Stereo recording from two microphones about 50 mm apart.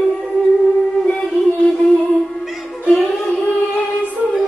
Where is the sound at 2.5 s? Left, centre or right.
Centre.